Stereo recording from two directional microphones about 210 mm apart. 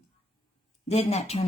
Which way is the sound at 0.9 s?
30° left (ahead or behind).